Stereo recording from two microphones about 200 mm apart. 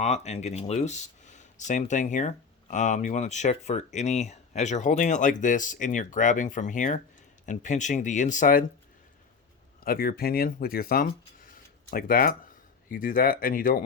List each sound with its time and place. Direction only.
0.0 s speech: 35° left (ahead or behind)
9.8 s speech: 45° left (ahead or behind)